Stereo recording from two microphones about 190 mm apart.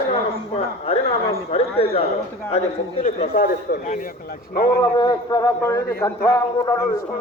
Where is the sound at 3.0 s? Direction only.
45° left (ahead or behind).